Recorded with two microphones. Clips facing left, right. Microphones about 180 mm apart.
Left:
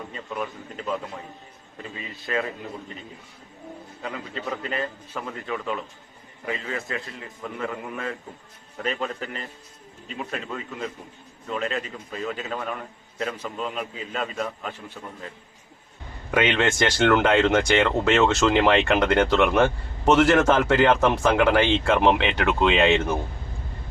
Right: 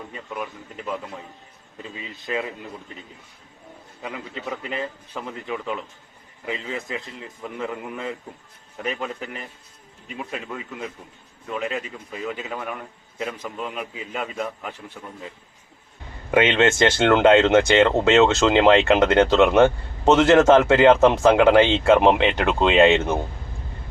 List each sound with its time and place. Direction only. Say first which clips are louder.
0.1 s a man's voice: left 1 dB; 15° right (ahead or behind)
2.0 s a man's voice: even; 15° right (ahead or behind)
4.0 s a man's voice: even; 15° right (ahead or behind)
16.3 s speech: right 4 dB; 20° right (ahead or behind)